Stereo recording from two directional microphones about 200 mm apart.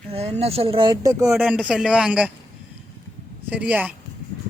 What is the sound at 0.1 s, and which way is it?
Speech, 30° right (ahead or behind).